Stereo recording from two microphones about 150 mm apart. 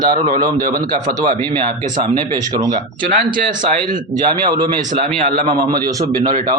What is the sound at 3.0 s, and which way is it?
Speech, 65° right (ahead or behind).